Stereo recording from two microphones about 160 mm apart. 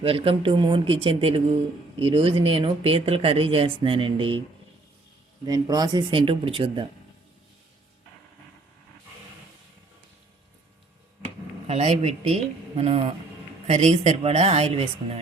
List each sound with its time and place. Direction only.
0.0 s speech: 35° right (ahead or behind)
5.5 s speech: 25° right (ahead or behind)
11.7 s speech: 40° right (ahead or behind)